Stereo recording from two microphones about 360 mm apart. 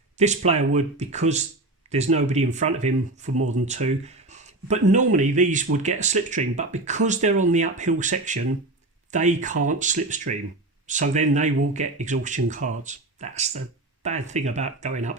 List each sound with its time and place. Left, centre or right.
0.2 s speech: centre